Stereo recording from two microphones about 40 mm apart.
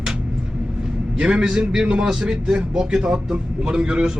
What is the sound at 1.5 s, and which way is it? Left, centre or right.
A man's voice, centre.